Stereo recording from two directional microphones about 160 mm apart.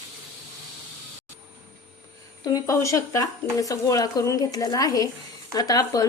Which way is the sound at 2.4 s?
25° left (ahead or behind).